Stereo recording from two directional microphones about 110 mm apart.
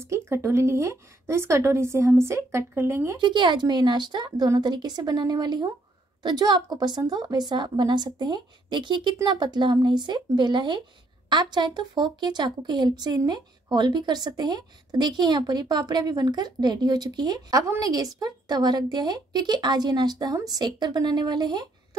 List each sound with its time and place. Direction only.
0.0 s a woman's voice: 25° right (ahead or behind)
3.2 s speech: 45° right (ahead or behind)